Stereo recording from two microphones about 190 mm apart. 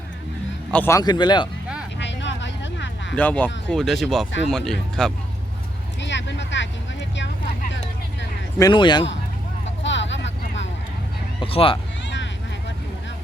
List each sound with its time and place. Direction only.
0.7 s a man's voice: 10° left (ahead or behind)
2.0 s vehicle: 70° left (ahead or behind)
3.2 s speech: 10° left (ahead or behind)
6.0 s vehicle: 70° left (ahead or behind)
7.7 s vehicle: 70° left (ahead or behind)
8.5 s a man's voice: 20° left (ahead or behind)
9.8 s vehicle: 70° left (ahead or behind)
11.3 s speech: 30° left (ahead or behind)
12.1 s vehicle: 70° left (ahead or behind)